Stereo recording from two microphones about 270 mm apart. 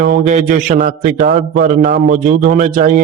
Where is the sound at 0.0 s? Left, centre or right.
Right.